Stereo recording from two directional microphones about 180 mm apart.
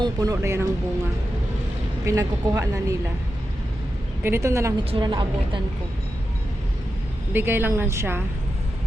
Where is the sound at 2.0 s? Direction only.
15° right (ahead or behind).